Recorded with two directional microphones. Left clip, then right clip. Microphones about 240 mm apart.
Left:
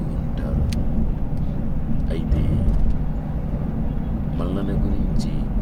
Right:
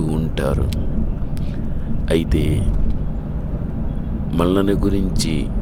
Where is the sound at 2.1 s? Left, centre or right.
Right.